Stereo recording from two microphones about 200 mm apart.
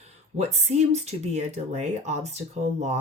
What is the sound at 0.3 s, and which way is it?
Speech, 35° right (ahead or behind).